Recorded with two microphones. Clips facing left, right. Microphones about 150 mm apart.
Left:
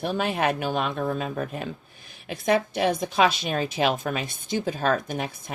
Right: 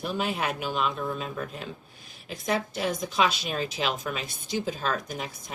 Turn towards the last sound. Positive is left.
turn(degrees=60)  # may be behind; listen again after turning